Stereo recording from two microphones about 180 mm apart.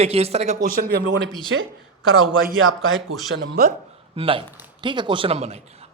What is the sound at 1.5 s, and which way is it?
Speech, 90° right.